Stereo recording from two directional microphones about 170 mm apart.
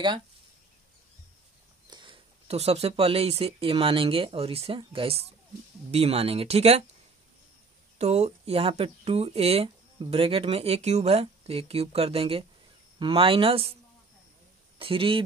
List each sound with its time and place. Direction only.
1.9 s speech: 30° right (ahead or behind)
8.0 s speech: 40° right (ahead or behind)
14.8 s speech: 30° right (ahead or behind)